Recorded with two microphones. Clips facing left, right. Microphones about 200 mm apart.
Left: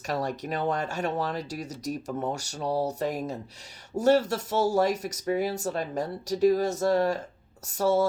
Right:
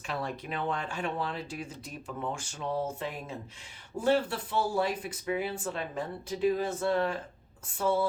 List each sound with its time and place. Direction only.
0.1 s speech: 40° left (ahead or behind)